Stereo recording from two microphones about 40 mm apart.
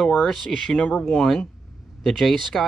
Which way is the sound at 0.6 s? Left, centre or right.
Centre.